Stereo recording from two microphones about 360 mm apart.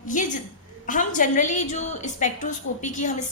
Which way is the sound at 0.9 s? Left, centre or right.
Left.